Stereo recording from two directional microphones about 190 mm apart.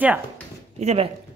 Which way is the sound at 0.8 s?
35° right (ahead or behind).